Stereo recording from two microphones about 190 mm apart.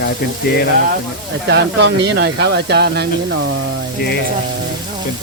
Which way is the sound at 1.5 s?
60° right (ahead or behind).